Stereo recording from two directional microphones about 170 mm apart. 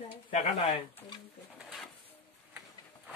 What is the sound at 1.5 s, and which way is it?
Pigeon, centre (ahead or behind).